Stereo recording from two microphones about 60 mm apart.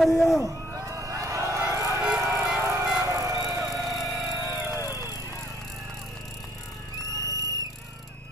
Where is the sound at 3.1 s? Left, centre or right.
Right.